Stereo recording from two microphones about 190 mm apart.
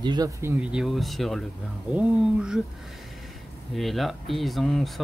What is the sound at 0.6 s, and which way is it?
Speech, 5° right (ahead or behind).